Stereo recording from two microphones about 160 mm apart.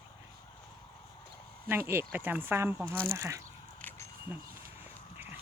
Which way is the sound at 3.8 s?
10° left (ahead or behind).